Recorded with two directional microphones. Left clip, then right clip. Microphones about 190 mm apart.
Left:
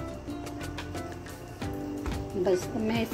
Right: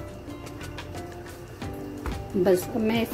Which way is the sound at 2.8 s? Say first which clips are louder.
Right 4 dB; 10° right (ahead or behind).